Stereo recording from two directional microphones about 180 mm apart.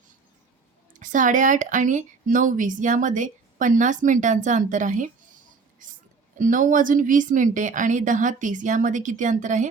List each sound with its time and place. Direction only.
0.9 s a woman's voice: 45° right (ahead or behind)
5.8 s a sound: 45° right (ahead or behind)
6.4 s a woman's voice: 45° right (ahead or behind)